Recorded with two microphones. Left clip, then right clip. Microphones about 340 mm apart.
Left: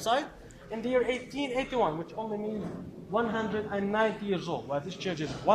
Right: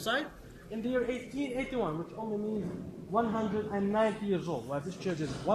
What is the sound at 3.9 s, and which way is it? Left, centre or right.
Speech, left.